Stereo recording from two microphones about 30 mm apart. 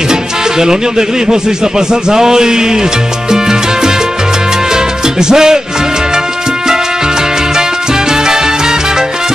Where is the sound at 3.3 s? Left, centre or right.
Right.